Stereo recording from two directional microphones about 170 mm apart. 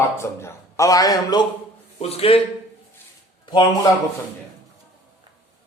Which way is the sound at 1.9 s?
35° left (ahead or behind).